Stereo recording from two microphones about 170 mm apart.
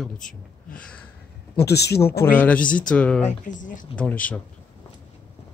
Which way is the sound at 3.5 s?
50° left (ahead or behind).